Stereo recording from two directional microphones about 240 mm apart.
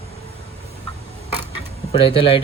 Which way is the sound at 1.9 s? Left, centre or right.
Left.